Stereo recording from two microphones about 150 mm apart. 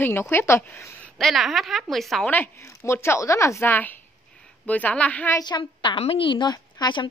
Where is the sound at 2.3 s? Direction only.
15° left (ahead or behind).